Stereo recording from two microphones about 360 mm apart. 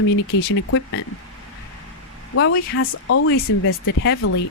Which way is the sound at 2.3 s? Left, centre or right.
Left.